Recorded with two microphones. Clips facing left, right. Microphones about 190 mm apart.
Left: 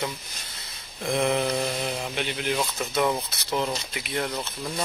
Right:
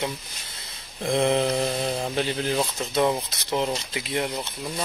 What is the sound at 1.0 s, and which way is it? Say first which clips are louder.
Speech: right 2 dB; 25° right (ahead or behind).